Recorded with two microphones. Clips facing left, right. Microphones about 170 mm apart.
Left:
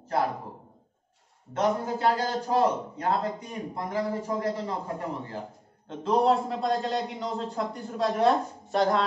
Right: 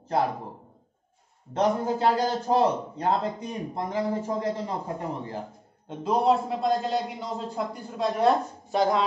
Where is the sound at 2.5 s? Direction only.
30° right (ahead or behind).